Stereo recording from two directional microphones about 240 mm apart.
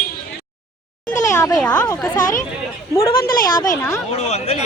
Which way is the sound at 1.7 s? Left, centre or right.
Centre.